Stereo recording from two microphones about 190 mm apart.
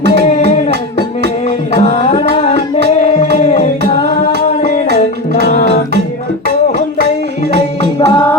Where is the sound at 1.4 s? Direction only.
35° left (ahead or behind).